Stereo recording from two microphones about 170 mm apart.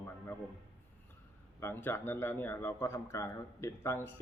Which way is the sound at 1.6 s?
10° left (ahead or behind).